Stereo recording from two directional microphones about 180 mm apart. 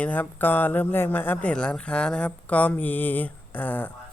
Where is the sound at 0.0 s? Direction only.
10° left (ahead or behind).